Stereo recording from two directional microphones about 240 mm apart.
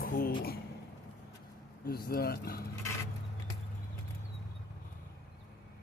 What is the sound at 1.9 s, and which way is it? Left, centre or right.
Speech, left.